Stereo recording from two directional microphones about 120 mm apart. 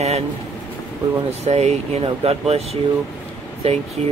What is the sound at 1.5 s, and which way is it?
Speech, 65° right (ahead or behind).